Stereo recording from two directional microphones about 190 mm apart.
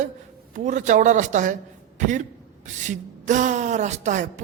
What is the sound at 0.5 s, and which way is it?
A man's voice, 40° right (ahead or behind).